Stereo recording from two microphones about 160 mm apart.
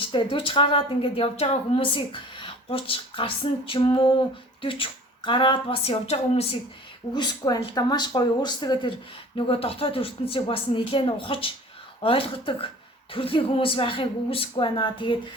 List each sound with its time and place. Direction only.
0.0 s a woman's voice: 30° left (ahead or behind)
7.1 s a woman's voice: 25° left (ahead or behind)